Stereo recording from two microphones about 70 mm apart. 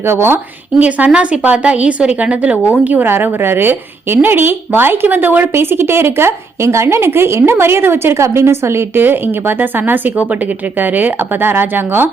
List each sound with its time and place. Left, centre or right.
0.1 s speech: right
0.8 s speech: centre